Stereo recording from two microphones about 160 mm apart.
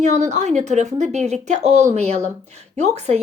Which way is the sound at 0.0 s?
45° right (ahead or behind).